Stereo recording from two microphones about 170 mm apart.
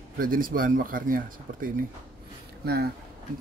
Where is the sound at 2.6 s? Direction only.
70° right (ahead or behind).